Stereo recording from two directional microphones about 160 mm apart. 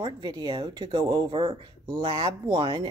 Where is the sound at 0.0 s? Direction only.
25° right (ahead or behind).